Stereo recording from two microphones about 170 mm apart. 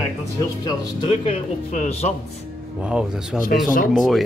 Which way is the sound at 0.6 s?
30° left (ahead or behind).